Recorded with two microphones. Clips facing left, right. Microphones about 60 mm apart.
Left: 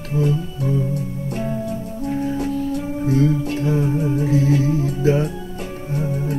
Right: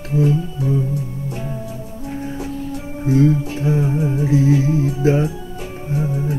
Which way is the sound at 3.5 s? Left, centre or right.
Centre.